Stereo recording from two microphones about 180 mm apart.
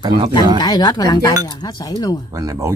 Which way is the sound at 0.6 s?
25° left (ahead or behind).